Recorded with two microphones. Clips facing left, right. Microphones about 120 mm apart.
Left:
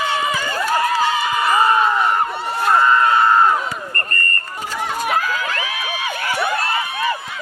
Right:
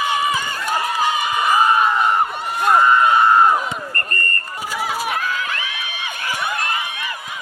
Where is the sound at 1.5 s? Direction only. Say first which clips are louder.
Even; 15° right (ahead or behind).